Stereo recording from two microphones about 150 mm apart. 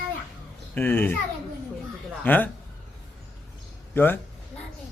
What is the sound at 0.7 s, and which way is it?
Speech, 10° left (ahead or behind).